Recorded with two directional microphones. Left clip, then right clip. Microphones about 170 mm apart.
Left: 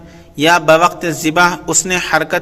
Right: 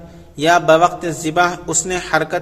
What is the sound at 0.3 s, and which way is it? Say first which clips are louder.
A man's voice: left 2 dB; 15° left (ahead or behind).